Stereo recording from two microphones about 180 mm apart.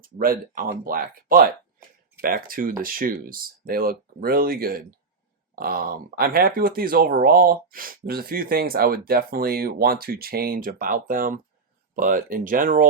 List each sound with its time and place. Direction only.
0.0 s speech: 50° right (ahead or behind)